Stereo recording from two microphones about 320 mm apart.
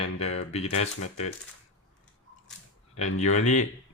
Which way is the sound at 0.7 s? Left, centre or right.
Left.